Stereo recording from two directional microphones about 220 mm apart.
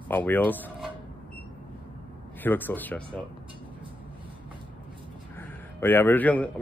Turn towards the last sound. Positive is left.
turn(degrees=5)  # may be behind; listen again after turning